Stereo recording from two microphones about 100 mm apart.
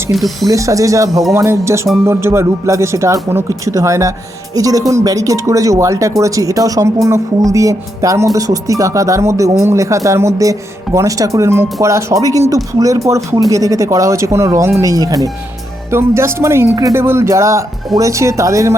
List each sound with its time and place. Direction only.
0.1 s speech: centre (ahead or behind)
0.4 s speech: 35° right (ahead or behind)